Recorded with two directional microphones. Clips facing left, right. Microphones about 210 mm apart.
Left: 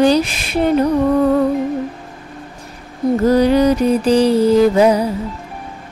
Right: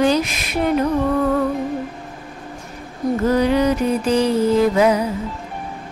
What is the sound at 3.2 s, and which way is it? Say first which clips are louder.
Mantra: left 4 dB; 35° left (ahead or behind).